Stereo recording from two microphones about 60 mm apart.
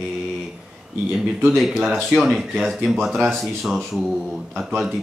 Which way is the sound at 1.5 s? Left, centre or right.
Centre.